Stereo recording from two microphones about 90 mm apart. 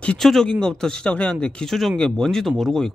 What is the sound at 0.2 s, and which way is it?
Speech, 5° left (ahead or behind).